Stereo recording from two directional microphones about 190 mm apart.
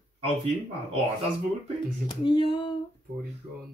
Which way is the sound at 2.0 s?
25° left (ahead or behind).